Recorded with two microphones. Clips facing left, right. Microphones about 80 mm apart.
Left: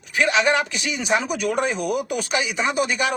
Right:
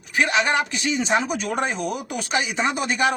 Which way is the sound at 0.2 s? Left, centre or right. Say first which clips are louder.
Left 1 dB; right.